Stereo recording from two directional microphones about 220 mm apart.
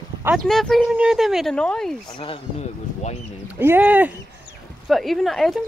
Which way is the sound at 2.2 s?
25° left (ahead or behind).